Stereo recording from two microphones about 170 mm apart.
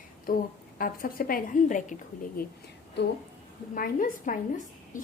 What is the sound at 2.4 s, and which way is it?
Speech, 65° left (ahead or behind).